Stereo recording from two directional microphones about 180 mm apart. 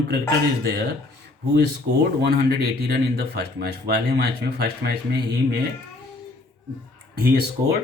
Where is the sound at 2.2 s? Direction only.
60° right (ahead or behind).